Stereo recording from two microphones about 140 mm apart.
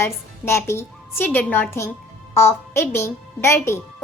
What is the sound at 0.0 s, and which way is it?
A child's voice, 20° left (ahead or behind).